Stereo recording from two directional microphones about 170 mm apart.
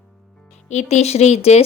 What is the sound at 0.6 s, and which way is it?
Speech, 40° left (ahead or behind).